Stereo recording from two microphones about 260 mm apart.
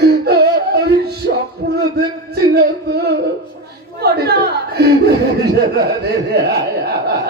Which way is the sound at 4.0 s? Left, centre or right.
Right.